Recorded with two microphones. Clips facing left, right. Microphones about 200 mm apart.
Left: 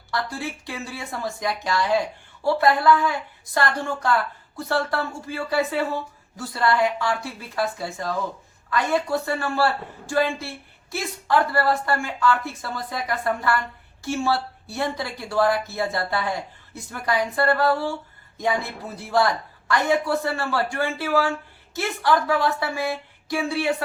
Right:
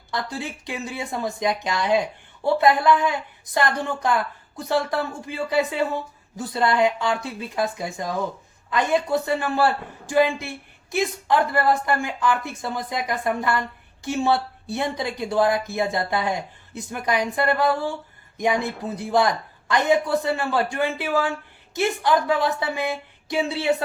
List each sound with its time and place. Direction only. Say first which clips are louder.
0.1 s speech: left 1 dB; 20° right (ahead or behind)